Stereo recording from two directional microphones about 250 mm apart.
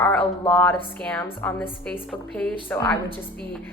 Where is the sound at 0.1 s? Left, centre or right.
Centre.